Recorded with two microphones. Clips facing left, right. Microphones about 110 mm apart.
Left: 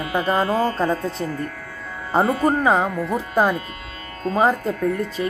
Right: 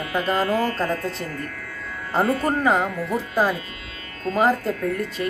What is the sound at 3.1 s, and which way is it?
Speech, 45° left (ahead or behind).